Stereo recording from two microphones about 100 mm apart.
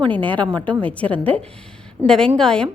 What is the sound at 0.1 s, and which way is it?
A woman's voice, 15° left (ahead or behind).